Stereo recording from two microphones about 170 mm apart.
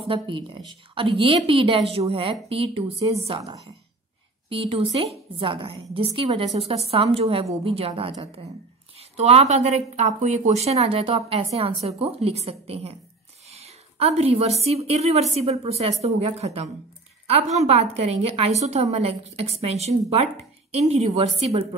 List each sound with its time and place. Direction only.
0.0 s a woman's voice: 30° right (ahead or behind)
3.3 s a woman's voice: 20° right (ahead or behind)
4.5 s a woman's voice: 30° right (ahead or behind)